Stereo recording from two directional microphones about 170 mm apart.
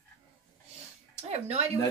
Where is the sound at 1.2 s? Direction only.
40° right (ahead or behind).